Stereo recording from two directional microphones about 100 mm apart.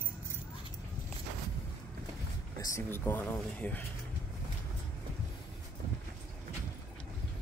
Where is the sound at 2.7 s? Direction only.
25° left (ahead or behind).